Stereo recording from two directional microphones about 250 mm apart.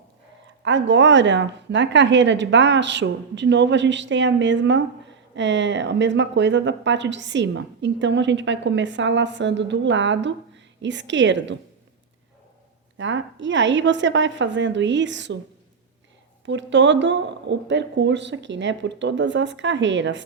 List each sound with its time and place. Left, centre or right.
0.6 s speech: right
13.0 s speech: right
16.5 s speech: right